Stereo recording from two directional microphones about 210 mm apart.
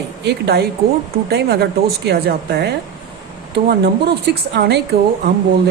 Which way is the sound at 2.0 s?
50° right (ahead or behind).